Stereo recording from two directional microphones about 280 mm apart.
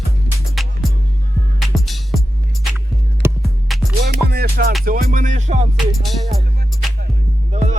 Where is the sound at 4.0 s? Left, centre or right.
Right.